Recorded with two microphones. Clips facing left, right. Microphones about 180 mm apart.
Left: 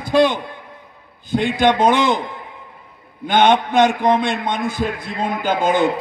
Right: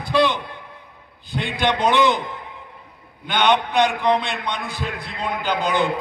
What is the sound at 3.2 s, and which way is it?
A man's voice, 45° left (ahead or behind).